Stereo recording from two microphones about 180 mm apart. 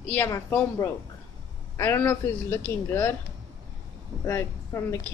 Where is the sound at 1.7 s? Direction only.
10° left (ahead or behind).